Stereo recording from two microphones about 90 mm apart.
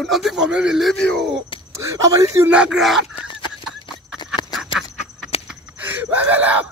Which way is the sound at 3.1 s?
60° left (ahead or behind).